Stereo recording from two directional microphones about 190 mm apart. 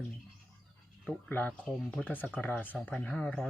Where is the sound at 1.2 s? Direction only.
10° left (ahead or behind).